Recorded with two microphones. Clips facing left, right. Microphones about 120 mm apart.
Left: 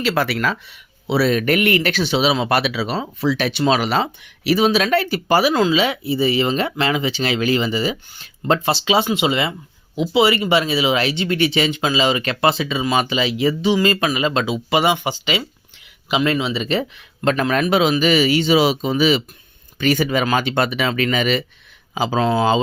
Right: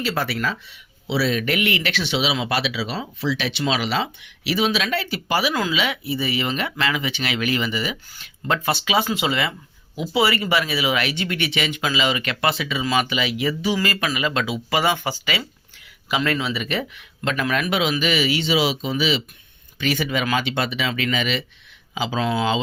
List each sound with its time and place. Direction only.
0.0 s speech: 75° left (ahead or behind); by 5.5 s 45° left (ahead or behind)
5.5 s speech: 30° left (ahead or behind)